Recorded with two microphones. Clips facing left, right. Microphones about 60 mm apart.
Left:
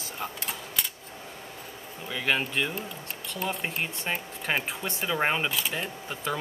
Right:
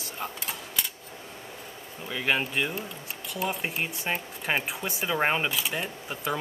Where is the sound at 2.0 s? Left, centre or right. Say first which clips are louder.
Even; centre.